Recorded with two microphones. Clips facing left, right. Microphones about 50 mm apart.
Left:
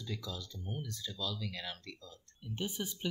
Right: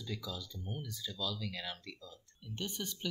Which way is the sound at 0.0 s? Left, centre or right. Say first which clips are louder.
Even; centre.